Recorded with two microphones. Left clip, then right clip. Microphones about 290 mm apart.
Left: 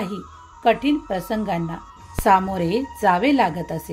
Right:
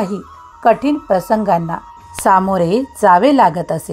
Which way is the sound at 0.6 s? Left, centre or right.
Right.